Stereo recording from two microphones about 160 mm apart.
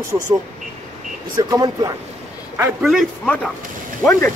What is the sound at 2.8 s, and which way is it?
Speech, centre (ahead or behind).